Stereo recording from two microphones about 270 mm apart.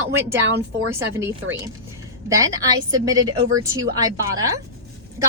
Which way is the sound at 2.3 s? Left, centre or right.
Centre.